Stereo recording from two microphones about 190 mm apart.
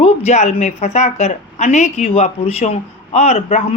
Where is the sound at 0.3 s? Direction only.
35° left (ahead or behind).